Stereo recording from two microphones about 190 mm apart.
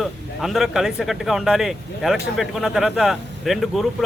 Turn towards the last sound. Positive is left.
turn(degrees=0)  # may be behind; listen again after turning